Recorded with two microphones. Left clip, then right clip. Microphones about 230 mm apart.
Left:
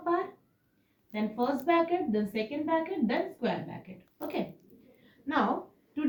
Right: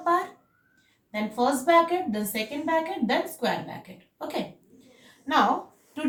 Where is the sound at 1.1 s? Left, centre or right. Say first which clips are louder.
Right 6 dB; centre.